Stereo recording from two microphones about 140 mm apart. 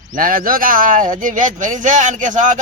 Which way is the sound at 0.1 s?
80° right.